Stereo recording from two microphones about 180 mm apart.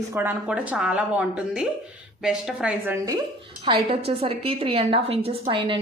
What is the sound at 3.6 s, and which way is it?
A woman's voice, 30° right (ahead or behind).